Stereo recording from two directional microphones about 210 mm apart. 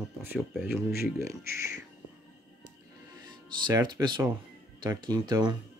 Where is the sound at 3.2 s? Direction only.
20° right (ahead or behind).